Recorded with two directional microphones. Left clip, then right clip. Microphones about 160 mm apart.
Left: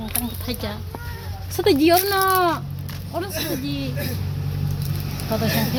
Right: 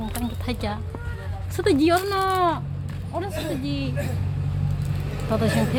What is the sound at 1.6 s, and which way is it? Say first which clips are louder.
Speech: left 3 dB; 5° right (ahead or behind).